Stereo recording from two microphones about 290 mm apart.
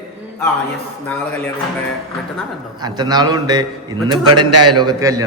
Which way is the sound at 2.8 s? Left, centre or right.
Centre.